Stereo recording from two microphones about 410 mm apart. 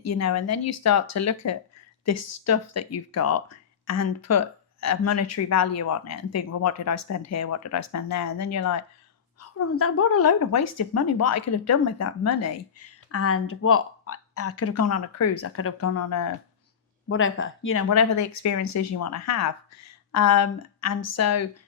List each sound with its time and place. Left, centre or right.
0.0 s a woman's voice: left
17.1 s a woman's voice: left